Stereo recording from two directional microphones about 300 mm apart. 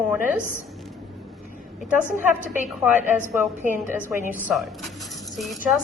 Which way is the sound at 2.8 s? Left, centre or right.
Centre.